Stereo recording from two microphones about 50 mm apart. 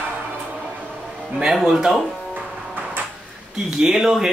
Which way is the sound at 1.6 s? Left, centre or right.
Centre.